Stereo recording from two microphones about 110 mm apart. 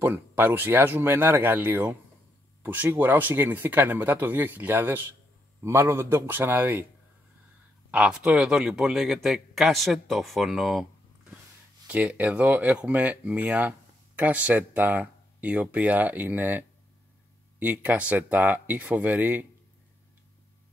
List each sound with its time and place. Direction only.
0.0 s speech: 20° right (ahead or behind)
7.9 s speech: 10° right (ahead or behind)
11.9 s speech: 15° right (ahead or behind)